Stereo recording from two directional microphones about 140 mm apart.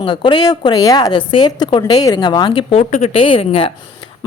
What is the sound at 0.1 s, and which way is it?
A woman's voice, 35° left (ahead or behind).